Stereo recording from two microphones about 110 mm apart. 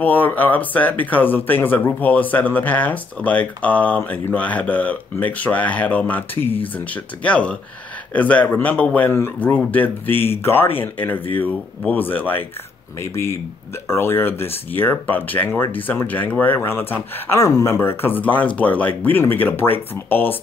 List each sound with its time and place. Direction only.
0.0 s speech: 15° left (ahead or behind)